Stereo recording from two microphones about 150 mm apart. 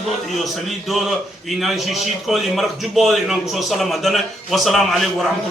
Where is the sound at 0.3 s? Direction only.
Centre (ahead or behind).